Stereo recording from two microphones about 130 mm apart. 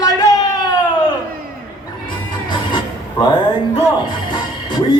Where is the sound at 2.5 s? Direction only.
35° left (ahead or behind).